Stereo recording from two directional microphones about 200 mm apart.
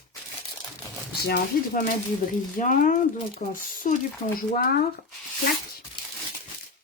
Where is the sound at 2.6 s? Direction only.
40° left (ahead or behind).